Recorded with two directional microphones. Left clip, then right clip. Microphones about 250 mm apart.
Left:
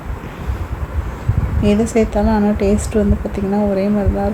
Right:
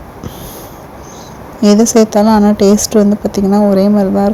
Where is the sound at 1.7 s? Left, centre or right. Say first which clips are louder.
Right 7 dB; right.